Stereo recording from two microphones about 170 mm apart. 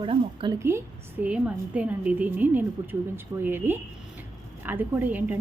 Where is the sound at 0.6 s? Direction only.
15° right (ahead or behind).